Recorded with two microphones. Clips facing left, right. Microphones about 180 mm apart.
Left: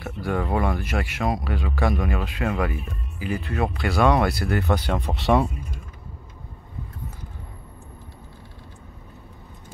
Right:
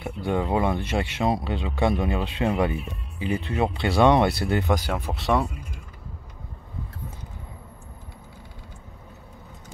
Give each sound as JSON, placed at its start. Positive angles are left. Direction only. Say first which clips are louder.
{"t": 0.0, "sound": "speech", "louder": "right 1 dB", "side_deg": -20}
{"t": 4.7, "sound": "speech", "louder": "left 2 dB", "side_deg": -5}